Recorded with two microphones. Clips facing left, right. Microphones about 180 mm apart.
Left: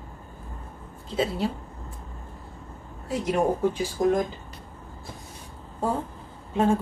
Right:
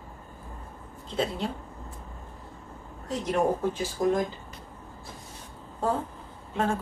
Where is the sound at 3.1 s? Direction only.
10° left (ahead or behind).